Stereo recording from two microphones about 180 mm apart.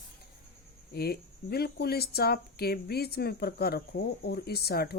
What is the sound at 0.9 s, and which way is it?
Speech, 60° left (ahead or behind).